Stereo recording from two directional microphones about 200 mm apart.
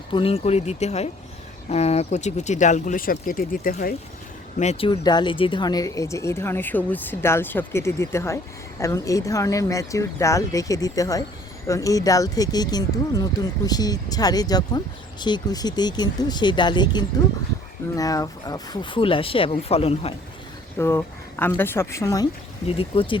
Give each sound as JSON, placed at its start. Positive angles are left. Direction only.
{"t": 0.1, "sound": "speech", "side_deg": 30}
{"t": 4.5, "sound": "speech", "side_deg": 35}
{"t": 4.9, "sound": "speech", "side_deg": 20}
{"t": 20.7, "sound": "speech", "side_deg": 10}
{"t": 22.6, "sound": "speech", "side_deg": 25}